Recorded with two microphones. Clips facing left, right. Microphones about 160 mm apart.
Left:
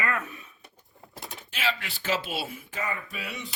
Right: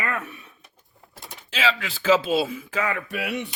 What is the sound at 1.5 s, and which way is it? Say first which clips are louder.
Speech: right 6 dB; 90° right.